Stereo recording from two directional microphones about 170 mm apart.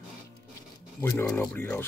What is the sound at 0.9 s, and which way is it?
Speech, 10° left (ahead or behind).